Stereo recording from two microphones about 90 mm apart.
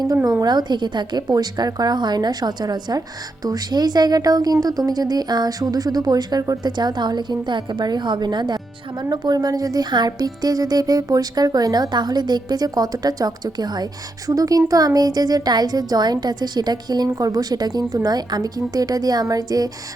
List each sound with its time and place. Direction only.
0.3 s a woman's voice: 50° right (ahead or behind)